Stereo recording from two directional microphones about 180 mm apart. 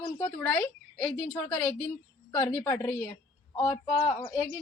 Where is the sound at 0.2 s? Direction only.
10° left (ahead or behind).